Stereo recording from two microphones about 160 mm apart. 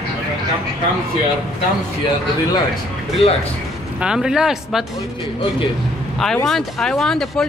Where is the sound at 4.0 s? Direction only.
5° right (ahead or behind).